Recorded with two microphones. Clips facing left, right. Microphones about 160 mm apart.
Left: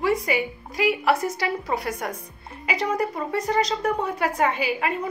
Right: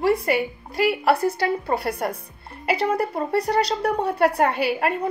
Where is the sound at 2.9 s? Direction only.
60° right (ahead or behind).